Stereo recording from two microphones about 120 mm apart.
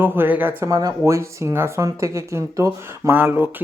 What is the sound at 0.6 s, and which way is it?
Speech, 30° right (ahead or behind).